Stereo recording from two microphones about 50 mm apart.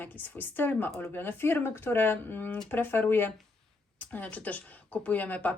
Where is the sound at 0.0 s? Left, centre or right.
Left.